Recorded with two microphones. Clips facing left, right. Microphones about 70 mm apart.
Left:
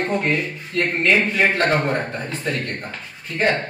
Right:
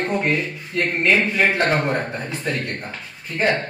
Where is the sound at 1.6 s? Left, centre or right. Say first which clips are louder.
Left 1 dB; centre.